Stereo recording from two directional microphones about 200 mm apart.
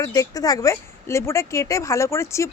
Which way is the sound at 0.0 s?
15° left (ahead or behind).